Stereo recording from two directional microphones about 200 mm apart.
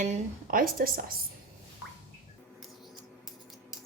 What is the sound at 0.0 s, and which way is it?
Dishes, 40° right (ahead or behind).